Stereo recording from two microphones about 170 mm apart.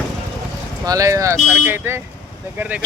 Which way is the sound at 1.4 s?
Centre (ahead or behind).